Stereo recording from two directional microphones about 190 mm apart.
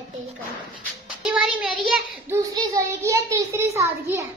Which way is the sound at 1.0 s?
5° right (ahead or behind).